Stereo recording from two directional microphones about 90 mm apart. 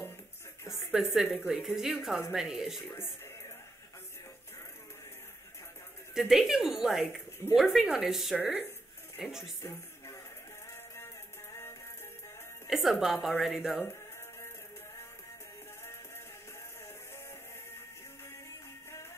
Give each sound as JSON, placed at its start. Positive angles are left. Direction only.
{"t": 0.7, "sound": "a woman's voice", "side_deg": -5}
{"t": 6.1, "sound": "a woman's voice", "side_deg": -5}
{"t": 9.6, "sound": "music", "side_deg": 30}
{"t": 12.6, "sound": "a woman's voice", "side_deg": 0}